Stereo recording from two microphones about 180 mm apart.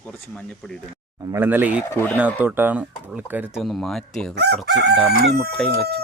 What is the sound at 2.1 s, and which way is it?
Speech, 10° right (ahead or behind).